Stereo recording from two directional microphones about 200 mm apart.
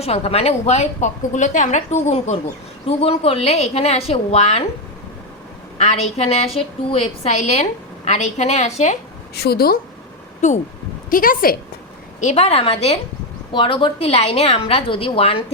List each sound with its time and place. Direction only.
0.0 s a woman's voice: 30° left (ahead or behind)
5.7 s a woman's voice: 35° left (ahead or behind)
9.3 s speech: 55° left (ahead or behind)
10.4 s a woman's voice: 35° left (ahead or behind)
12.2 s a woman's voice: 35° left (ahead or behind)